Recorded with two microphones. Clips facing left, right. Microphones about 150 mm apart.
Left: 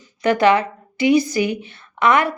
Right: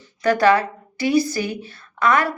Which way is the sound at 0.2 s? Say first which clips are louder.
Left 1 dB; 20° left (ahead or behind).